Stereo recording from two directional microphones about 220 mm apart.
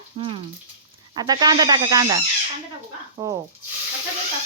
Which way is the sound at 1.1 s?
20° right (ahead or behind).